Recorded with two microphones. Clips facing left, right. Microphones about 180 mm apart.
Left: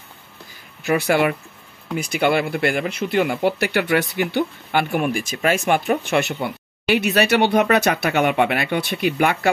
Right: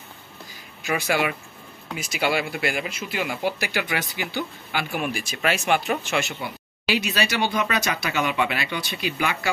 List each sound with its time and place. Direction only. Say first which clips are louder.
0.8 s speech: left 6 dB; 60° left (ahead or behind)